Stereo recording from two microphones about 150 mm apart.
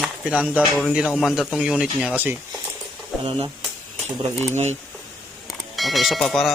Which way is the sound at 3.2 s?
40° right (ahead or behind).